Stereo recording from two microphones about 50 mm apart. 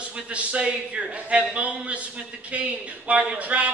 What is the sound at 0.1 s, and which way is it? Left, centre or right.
A man's voice, right.